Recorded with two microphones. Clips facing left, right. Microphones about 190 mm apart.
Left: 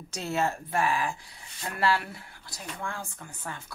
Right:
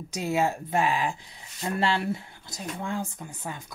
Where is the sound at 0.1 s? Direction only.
15° right (ahead or behind).